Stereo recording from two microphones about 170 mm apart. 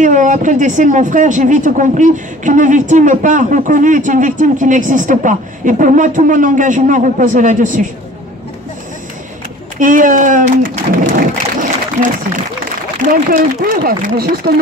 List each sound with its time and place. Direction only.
0.0 s speech: 50° right (ahead or behind)
9.8 s a sound: 50° right (ahead or behind)
13.1 s speech: 55° right (ahead or behind)